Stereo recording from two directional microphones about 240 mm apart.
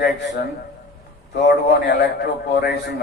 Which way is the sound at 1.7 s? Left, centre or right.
Left.